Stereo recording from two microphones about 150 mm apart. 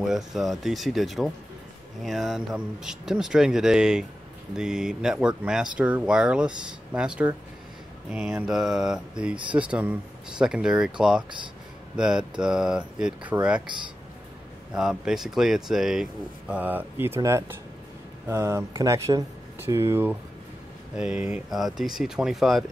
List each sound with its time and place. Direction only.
0.0 s speech: centre (ahead or behind)
14.7 s speech: 5° right (ahead or behind)